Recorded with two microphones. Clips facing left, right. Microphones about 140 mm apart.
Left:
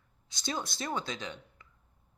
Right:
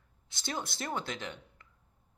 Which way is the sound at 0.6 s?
60° right (ahead or behind).